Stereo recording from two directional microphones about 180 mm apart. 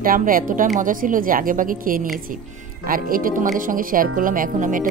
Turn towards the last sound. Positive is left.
turn(degrees=-50)  # may be behind; listen again after turning